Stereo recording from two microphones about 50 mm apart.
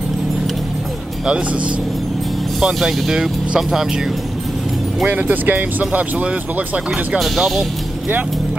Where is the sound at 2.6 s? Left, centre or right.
Centre.